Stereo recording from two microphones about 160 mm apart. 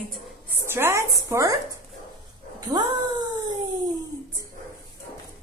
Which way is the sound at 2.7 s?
25° right (ahead or behind).